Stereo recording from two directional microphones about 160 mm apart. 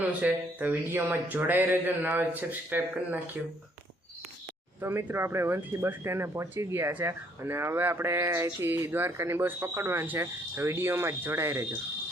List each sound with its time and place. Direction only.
0.2 s speech: 10° right (ahead or behind)
4.8 s speech: 15° right (ahead or behind)